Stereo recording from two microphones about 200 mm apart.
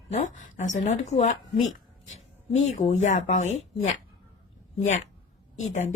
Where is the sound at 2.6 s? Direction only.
35° left (ahead or behind).